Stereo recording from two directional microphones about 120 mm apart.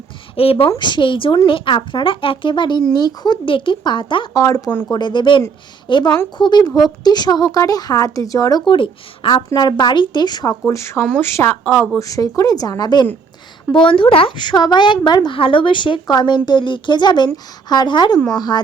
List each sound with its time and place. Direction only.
0.3 s speech: 50° left (ahead or behind)
0.8 s a woman's voice: 40° left (ahead or behind)
4.4 s speech: 30° left (ahead or behind)
4.9 s a woman's voice: 40° left (ahead or behind)
9.3 s a woman's voice: 35° left (ahead or behind)
10.7 s a woman's voice: 25° left (ahead or behind)
13.7 s a woman's voice: 45° left (ahead or behind)